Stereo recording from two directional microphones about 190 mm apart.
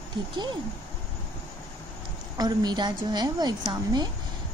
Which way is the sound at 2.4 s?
20° right (ahead or behind).